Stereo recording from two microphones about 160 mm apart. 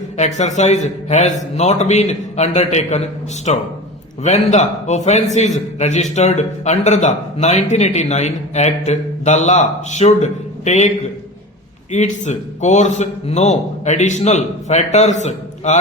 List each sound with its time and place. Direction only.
0.2 s a man's voice: 50° left (ahead or behind)